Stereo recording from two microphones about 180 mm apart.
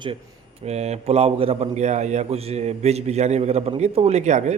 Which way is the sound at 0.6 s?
35° right (ahead or behind).